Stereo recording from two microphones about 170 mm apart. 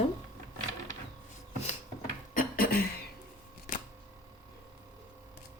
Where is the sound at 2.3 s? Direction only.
60° left (ahead or behind).